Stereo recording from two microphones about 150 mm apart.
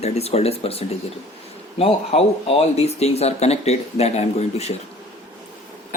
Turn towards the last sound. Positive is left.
turn(degrees=45)  # may be behind; listen again after turning